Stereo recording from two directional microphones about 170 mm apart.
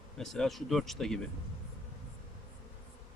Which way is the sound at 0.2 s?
Centre (ahead or behind).